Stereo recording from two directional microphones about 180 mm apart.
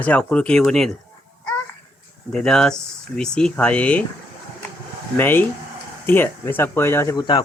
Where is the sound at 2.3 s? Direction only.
5° left (ahead or behind).